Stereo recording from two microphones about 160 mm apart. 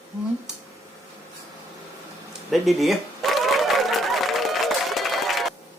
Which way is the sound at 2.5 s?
Centre (ahead or behind).